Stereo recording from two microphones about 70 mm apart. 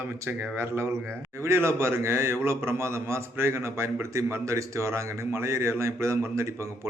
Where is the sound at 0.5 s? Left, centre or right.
Right.